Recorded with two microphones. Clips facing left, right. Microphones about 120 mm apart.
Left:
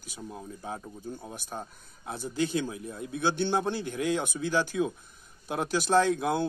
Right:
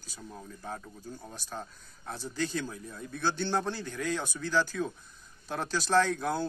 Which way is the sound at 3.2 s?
15° left (ahead or behind).